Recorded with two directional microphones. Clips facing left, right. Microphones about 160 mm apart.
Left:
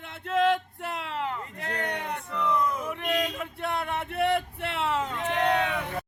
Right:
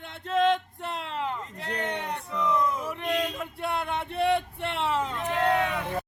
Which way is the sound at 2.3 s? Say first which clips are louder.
Right 1 dB; 5° right (ahead or behind).